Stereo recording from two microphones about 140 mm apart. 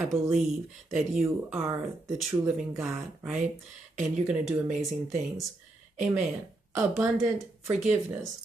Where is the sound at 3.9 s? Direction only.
55° right (ahead or behind).